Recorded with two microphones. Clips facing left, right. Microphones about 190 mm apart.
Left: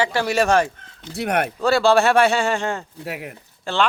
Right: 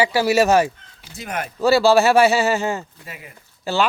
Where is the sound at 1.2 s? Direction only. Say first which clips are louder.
Left 7 dB; 65° left (ahead or behind).